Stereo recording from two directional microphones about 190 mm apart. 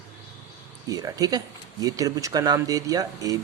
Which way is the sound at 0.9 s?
20° right (ahead or behind).